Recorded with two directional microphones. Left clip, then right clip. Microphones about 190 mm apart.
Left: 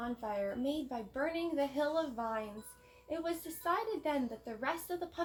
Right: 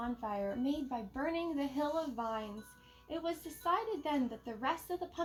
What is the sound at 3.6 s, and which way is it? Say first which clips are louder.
Speech: right 1 dB; 20° left (ahead or behind).